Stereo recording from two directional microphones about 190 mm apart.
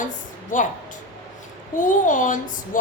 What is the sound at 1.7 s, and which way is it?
A woman's voice, 40° left (ahead or behind).